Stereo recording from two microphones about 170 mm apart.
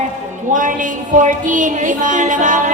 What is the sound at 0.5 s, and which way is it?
Music, 50° right (ahead or behind).